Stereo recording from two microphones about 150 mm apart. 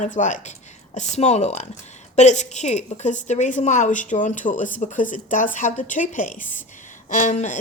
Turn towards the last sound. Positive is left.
turn(degrees=55)  # may be behind; listen again after turning